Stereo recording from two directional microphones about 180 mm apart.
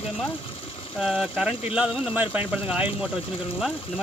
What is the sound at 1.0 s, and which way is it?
Speech, 5° right (ahead or behind).